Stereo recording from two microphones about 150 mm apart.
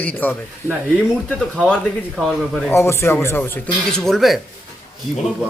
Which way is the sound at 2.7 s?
15° left (ahead or behind).